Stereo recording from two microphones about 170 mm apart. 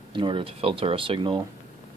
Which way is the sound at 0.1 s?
30° right (ahead or behind).